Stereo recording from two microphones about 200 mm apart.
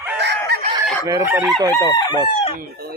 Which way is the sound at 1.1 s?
15° right (ahead or behind).